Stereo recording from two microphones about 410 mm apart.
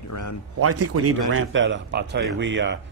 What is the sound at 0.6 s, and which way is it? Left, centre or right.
A man's voice, right.